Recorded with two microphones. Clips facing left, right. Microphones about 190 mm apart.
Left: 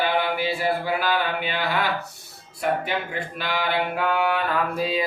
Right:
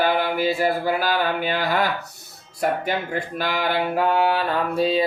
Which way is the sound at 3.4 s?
40° right (ahead or behind).